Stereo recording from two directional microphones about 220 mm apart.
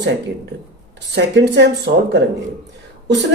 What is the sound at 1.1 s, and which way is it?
Speech, 50° right (ahead or behind).